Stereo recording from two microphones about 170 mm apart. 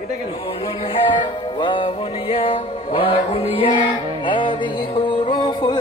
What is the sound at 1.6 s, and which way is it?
Music, 30° left (ahead or behind).